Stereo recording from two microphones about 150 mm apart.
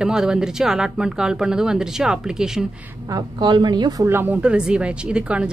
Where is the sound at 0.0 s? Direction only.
5° right (ahead or behind).